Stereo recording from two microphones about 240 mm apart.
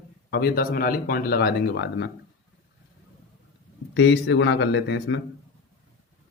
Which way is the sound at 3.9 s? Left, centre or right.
Left.